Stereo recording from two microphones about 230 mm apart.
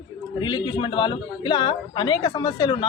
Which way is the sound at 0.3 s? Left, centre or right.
Left.